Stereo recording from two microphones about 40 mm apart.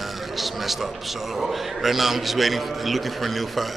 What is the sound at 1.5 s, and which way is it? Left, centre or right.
A man's voice, centre.